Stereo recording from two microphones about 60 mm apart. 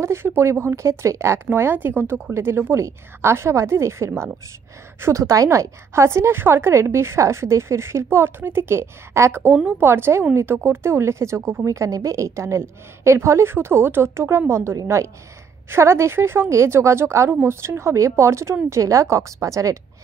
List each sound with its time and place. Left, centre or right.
0.0 s a woman's voice: right